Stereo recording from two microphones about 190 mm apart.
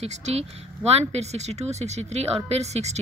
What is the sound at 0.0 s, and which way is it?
Speech, 35° right (ahead or behind).